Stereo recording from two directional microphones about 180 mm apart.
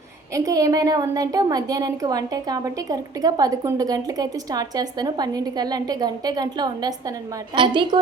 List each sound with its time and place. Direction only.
0.3 s a woman's voice: 20° right (ahead or behind)